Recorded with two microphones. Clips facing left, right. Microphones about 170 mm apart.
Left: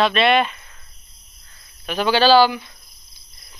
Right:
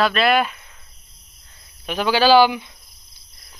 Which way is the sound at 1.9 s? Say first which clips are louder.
Even; 10° right (ahead or behind).